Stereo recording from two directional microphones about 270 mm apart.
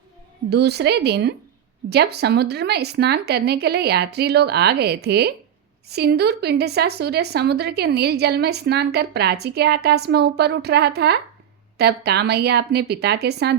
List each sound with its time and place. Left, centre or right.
0.5 s a woman's voice: right